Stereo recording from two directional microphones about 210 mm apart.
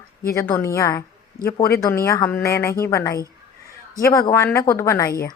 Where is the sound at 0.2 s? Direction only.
15° left (ahead or behind).